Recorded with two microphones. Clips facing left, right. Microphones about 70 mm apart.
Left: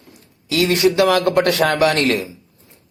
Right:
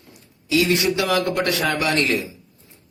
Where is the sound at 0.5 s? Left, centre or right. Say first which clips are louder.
Left 4 dB; left.